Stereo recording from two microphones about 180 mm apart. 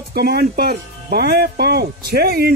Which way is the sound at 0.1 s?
65° right (ahead or behind).